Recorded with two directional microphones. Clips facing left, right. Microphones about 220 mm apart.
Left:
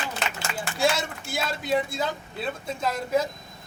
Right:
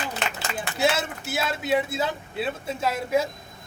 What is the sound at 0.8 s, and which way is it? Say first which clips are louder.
A man's voice: right 1 dB; 5° right (ahead or behind).